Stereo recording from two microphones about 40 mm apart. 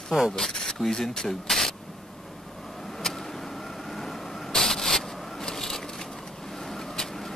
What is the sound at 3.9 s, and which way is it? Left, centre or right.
Vehicle, centre.